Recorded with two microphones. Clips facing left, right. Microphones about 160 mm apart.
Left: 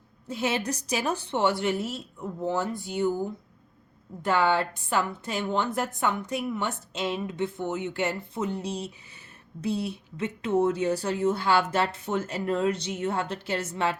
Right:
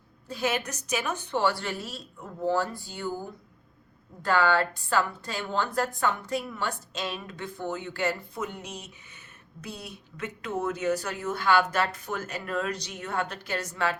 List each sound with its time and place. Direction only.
0.3 s a woman's voice: 25° left (ahead or behind)
4.2 s a woman's voice: 20° left (ahead or behind)